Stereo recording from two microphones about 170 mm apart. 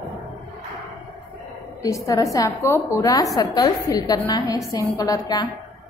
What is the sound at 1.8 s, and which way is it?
A woman's voice, 20° left (ahead or behind).